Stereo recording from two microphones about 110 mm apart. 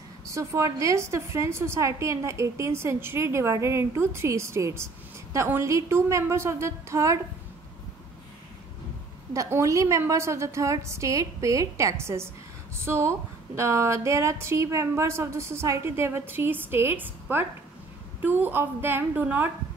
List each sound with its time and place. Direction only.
0.3 s a woman's voice: 30° right (ahead or behind)
9.3 s a woman's voice: 30° right (ahead or behind)